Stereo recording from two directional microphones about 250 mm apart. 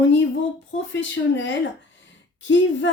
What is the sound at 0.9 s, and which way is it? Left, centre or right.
Speech, left.